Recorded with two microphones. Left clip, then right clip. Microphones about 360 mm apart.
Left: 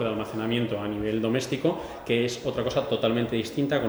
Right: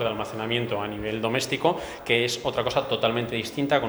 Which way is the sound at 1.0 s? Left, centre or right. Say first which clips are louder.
Left 1 dB; right.